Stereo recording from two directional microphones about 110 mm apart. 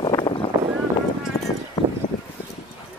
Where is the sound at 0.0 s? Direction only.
50° left (ahead or behind).